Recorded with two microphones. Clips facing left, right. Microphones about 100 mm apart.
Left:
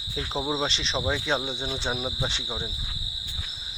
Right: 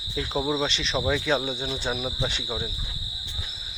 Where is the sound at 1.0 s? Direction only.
25° left (ahead or behind).